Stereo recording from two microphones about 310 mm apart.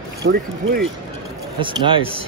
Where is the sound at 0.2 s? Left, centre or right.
Right.